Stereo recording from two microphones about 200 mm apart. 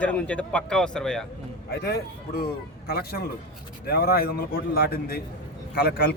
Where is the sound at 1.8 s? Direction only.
50° left (ahead or behind).